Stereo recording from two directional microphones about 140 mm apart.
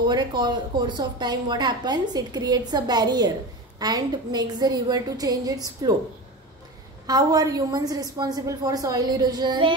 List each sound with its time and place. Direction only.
0.0 s a woman's voice: 30° right (ahead or behind)
7.1 s a woman's voice: 25° right (ahead or behind)